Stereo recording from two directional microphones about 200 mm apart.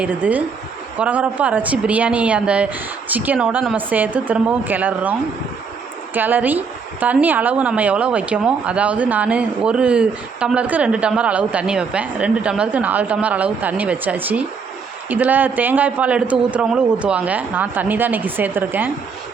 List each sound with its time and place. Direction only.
0.0 s speech: 5° right (ahead or behind)
6.1 s speech: 10° right (ahead or behind)